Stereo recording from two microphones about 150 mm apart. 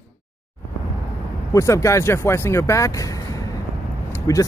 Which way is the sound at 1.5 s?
20° left (ahead or behind).